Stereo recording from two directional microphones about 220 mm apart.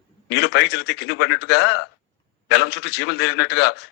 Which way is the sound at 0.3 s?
50° left (ahead or behind).